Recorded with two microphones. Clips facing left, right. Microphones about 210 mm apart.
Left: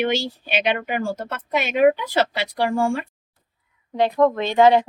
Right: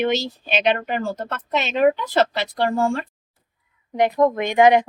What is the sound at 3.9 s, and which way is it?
Speech, 15° right (ahead or behind).